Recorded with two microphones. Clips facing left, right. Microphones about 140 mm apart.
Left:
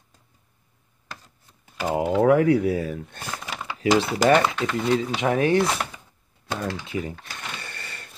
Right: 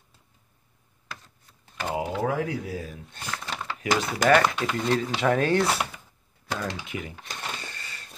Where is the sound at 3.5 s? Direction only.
10° left (ahead or behind).